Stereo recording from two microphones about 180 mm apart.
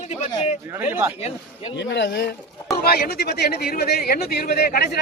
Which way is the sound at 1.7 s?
75° left (ahead or behind).